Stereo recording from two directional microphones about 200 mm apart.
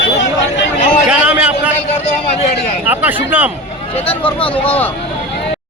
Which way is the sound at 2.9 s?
10° right (ahead or behind).